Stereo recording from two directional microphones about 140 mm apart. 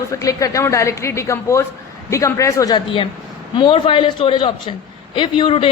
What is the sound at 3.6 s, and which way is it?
A woman's voice, 35° left (ahead or behind).